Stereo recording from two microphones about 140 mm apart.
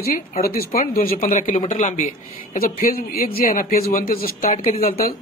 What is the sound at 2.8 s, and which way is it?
Speech, 90° left.